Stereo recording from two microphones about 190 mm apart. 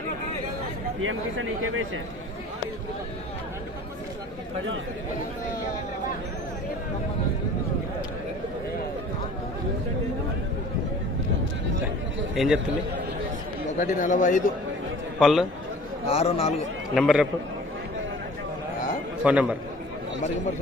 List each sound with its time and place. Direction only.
1.0 s speech: 90° right
12.4 s a man's voice: centre (ahead or behind)
13.7 s a man's voice: 40° left (ahead or behind)
15.2 s a man's voice: centre (ahead or behind)
16.0 s a man's voice: 30° left (ahead or behind)
16.9 s a man's voice: centre (ahead or behind)
19.2 s a man's voice: 5° right (ahead or behind)